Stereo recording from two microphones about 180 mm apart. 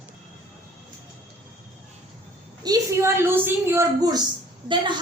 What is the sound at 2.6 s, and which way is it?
A woman's voice, 20° right (ahead or behind).